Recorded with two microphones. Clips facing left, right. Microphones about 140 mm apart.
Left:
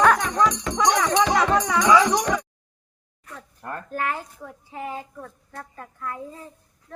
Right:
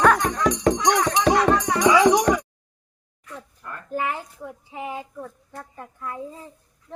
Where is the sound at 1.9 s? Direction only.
15° right (ahead or behind).